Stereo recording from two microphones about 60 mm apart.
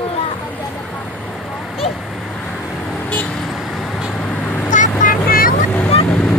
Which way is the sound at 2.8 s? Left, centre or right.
Left.